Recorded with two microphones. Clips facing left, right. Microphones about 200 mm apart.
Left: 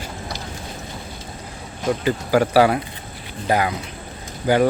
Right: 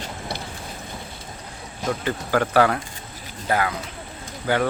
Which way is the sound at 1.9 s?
10° left (ahead or behind).